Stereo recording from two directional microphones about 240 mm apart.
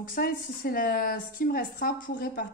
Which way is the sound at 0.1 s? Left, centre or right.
Left.